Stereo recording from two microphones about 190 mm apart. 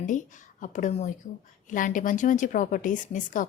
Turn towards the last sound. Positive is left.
turn(degrees=45)  # may be behind; listen again after turning